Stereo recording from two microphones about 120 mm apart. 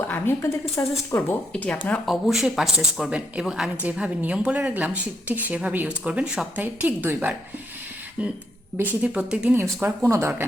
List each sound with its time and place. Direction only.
0.8 s speech: 15° left (ahead or behind)
2.0 s a woman's voice: centre (ahead or behind)
9.6 s speech: 20° right (ahead or behind)